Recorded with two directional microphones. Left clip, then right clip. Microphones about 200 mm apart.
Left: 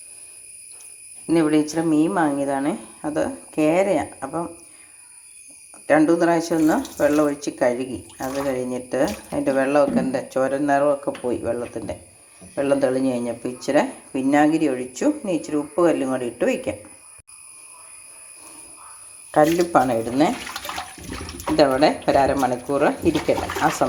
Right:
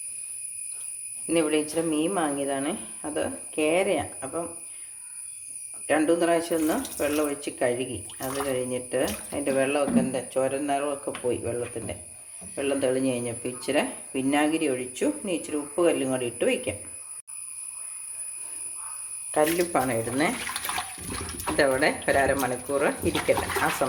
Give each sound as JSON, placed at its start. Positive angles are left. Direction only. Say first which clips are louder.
{"t": 1.3, "sound": "speech", "louder": "left 5 dB", "side_deg": 15}
{"t": 5.8, "sound": "speech", "louder": "left 6 dB", "side_deg": 15}
{"t": 8.7, "sound": "speech", "louder": "left 5 dB", "side_deg": 15}
{"t": 19.3, "sound": "speech", "louder": "left 7 dB", "side_deg": 15}
{"t": 21.5, "sound": "speech", "louder": "left 6 dB", "side_deg": 15}